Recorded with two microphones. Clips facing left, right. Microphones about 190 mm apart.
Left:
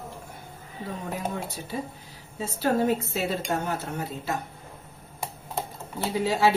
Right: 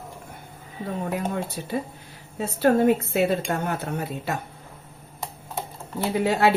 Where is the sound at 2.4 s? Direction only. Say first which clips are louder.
Right 5 dB; 60° right (ahead or behind).